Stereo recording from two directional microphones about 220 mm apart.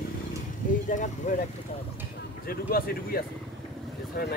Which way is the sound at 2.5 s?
40° left (ahead or behind).